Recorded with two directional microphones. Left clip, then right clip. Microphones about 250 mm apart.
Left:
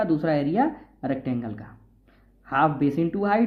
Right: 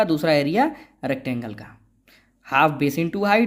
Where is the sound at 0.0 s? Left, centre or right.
Right.